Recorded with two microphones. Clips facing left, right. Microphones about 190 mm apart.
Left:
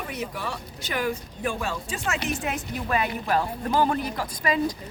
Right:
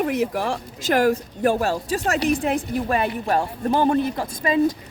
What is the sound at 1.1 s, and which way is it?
A woman's voice, 40° right (ahead or behind).